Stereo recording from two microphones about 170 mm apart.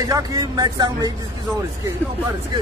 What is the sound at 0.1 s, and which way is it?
Speech, 20° right (ahead or behind).